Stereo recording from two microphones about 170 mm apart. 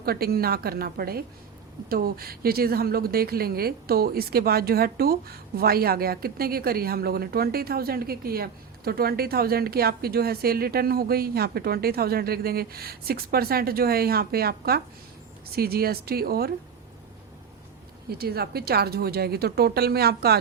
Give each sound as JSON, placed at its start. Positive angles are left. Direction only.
{"t": 0.0, "sound": "speech", "side_deg": -65}
{"t": 18.1, "sound": "a woman's voice", "side_deg": -65}